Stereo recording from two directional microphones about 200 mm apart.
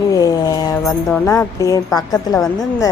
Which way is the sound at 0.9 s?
15° left (ahead or behind).